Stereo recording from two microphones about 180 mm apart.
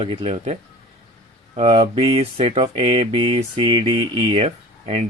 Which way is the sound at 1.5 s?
35° right (ahead or behind).